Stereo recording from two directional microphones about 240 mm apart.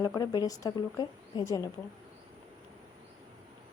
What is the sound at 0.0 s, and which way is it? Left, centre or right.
Speech, centre.